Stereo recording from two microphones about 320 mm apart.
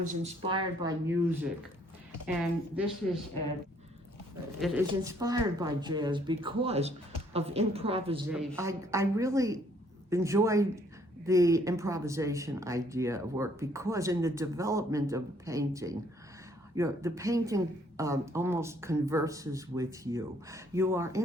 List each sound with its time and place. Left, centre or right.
0.3 s speech: centre
2.2 s a woman's voice: centre
4.6 s a woman's voice: centre
8.3 s speech: centre